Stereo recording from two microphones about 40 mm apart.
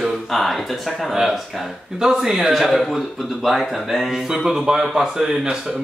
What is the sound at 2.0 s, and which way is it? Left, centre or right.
Speech, centre.